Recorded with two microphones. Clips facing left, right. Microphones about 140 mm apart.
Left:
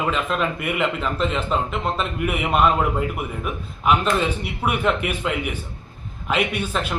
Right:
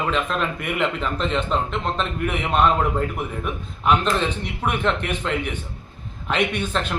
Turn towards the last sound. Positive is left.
turn(degrees=5)  # may be behind; listen again after turning